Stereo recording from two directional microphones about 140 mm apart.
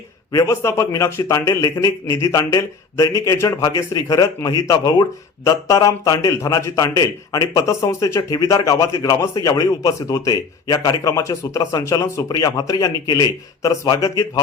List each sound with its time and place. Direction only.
0.3 s a man's voice: 20° left (ahead or behind)